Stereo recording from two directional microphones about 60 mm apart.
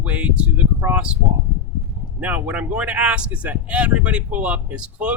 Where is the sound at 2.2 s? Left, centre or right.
Right.